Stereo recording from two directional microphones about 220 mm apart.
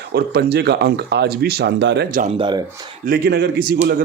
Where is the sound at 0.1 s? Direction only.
45° right (ahead or behind).